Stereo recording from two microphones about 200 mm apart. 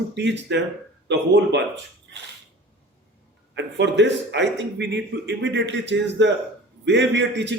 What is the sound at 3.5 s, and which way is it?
A man's voice, 60° right (ahead or behind).